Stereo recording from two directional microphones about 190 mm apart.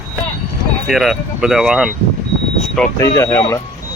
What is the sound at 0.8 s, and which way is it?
Speech, centre (ahead or behind).